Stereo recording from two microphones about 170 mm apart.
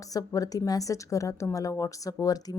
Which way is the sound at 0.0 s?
20° left (ahead or behind).